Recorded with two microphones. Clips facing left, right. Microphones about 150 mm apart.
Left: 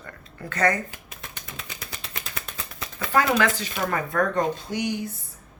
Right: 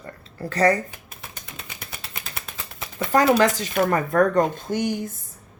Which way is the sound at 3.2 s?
35° right (ahead or behind).